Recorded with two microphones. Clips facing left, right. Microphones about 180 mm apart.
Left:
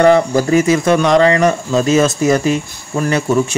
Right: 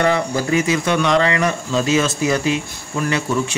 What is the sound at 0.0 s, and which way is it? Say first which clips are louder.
Speech: left 8 dB; 40° left (ahead or behind).